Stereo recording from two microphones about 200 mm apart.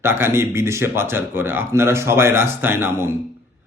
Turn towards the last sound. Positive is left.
turn(degrees=-10)  # may be behind; listen again after turning